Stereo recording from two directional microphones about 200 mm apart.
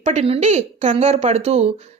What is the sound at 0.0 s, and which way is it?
A child's voice, 30° right (ahead or behind).